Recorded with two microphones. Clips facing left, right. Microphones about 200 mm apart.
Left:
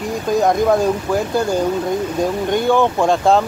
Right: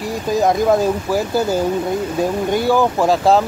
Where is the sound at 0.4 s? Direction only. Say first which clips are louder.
Even; centre (ahead or behind).